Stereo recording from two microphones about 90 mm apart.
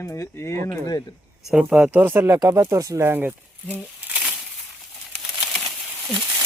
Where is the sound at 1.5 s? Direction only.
10° right (ahead or behind).